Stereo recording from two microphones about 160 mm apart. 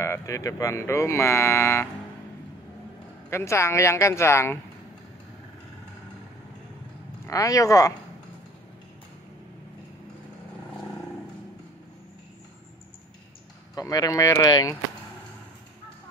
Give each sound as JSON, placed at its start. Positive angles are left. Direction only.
{"t": 0.0, "sound": "speech", "side_deg": 20}
{"t": 3.3, "sound": "speech", "side_deg": 15}
{"t": 7.2, "sound": "speech", "side_deg": 20}
{"t": 13.7, "sound": "speech", "side_deg": 20}